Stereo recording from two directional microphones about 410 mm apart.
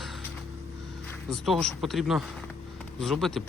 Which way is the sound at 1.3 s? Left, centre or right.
Centre.